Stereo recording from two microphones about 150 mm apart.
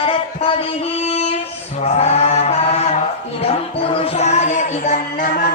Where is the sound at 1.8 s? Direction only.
45° left (ahead or behind).